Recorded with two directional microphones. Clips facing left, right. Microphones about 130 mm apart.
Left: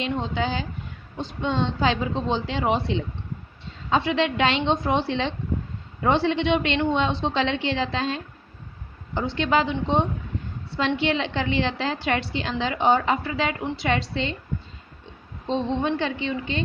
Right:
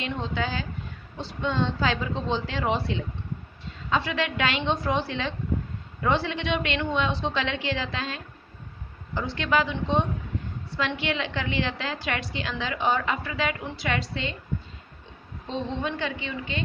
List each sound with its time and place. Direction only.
0.0 s a woman's voice: 20° left (ahead or behind)
15.4 s a woman's voice: 30° left (ahead or behind)